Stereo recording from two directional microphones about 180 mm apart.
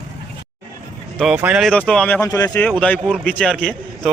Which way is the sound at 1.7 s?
5° left (ahead or behind).